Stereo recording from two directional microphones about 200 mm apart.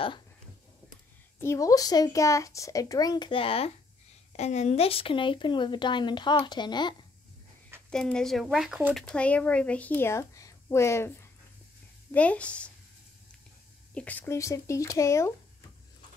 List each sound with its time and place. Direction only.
1.4 s speech: 15° left (ahead or behind)
7.9 s speech: 5° left (ahead or behind)
13.9 s speech: 10° left (ahead or behind)